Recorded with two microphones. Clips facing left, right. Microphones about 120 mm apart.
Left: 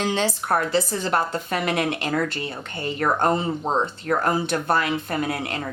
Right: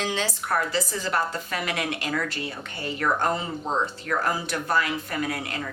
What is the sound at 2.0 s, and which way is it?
Speech, 30° left (ahead or behind).